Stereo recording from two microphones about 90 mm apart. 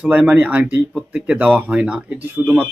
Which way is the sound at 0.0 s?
15° right (ahead or behind).